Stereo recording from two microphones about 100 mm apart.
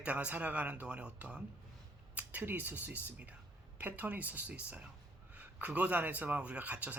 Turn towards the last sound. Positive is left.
turn(degrees=-15)  # may be behind; listen again after turning